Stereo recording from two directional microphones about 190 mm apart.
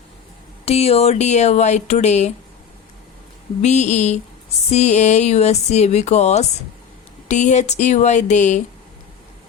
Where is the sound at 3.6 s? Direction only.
35° left (ahead or behind).